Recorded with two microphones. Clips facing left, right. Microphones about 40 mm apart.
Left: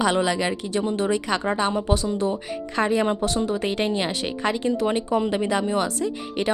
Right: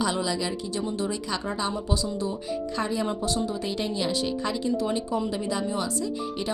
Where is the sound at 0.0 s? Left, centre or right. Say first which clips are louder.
Left 5 dB; left.